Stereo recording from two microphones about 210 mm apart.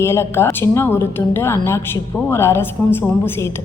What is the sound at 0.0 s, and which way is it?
A man's voice, 10° left (ahead or behind).